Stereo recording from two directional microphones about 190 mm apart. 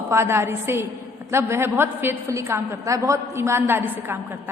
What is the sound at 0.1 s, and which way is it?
A woman's voice, 15° right (ahead or behind).